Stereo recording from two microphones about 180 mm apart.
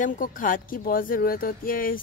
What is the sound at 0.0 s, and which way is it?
Speech, 50° left (ahead or behind).